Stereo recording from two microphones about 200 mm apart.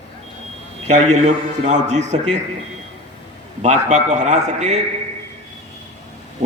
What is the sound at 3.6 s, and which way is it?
A man's voice, 35° right (ahead or behind).